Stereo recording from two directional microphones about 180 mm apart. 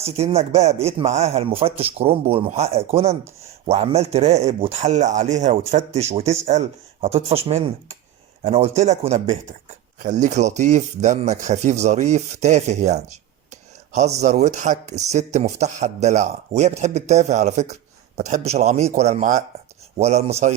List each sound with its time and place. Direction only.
0.0 s speech: 35° right (ahead or behind)
13.5 s a sound: 40° right (ahead or behind)
14.2 s speech: 40° right (ahead or behind)